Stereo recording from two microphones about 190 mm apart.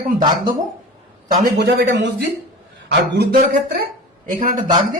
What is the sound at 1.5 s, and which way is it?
Speech, 60° right (ahead or behind).